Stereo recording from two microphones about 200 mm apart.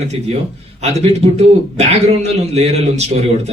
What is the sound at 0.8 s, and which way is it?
A man's voice, 35° right (ahead or behind).